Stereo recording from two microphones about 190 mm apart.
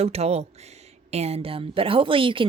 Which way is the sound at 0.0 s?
35° right (ahead or behind).